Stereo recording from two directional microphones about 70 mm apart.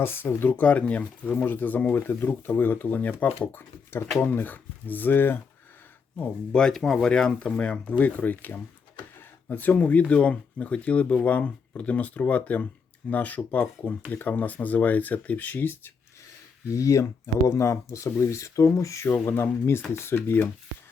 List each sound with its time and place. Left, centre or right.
0.0 s speech: left
0.5 s speech: left
6.5 s speech: centre; by 15.9 s left
16.7 s speech: left
19.0 s speech: left